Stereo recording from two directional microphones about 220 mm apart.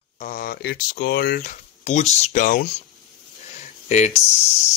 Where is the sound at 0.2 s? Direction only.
40° left (ahead or behind).